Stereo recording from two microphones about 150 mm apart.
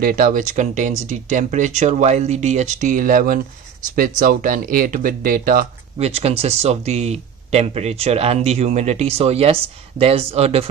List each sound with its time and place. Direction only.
0.0 s speech: 65° right (ahead or behind)
5.9 s speech: 45° right (ahead or behind)